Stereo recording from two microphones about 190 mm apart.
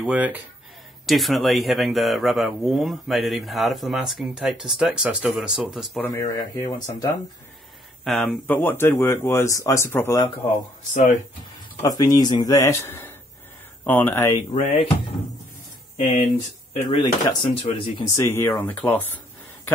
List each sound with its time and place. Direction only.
0.0 s speech: 5° right (ahead or behind)
6.0 s speech: 15° left (ahead or behind)
6.5 s speech: 25° left (ahead or behind)
8.0 s speech: centre (ahead or behind)
11.8 s speech: 20° left (ahead or behind)
14.5 s speech: 35° left (ahead or behind)
16.7 s speech: 30° left (ahead or behind); by 19.7 s 10° left (ahead or behind)